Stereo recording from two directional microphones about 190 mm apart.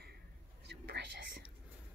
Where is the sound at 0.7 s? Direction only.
60° right (ahead or behind).